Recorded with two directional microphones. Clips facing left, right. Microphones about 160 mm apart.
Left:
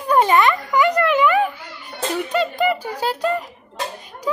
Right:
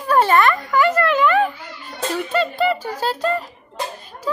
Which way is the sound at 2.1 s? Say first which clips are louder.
Even; 15° left (ahead or behind).